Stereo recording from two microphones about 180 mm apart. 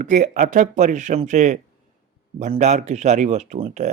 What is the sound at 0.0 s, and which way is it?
Speech, 45° right (ahead or behind).